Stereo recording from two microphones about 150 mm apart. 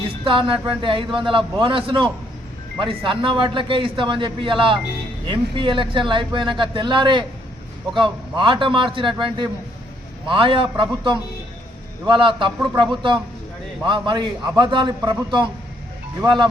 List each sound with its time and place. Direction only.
0.3 s a man's voice: 35° right (ahead or behind)